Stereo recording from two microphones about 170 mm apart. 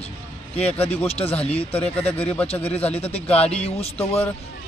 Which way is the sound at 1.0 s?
35° left (ahead or behind).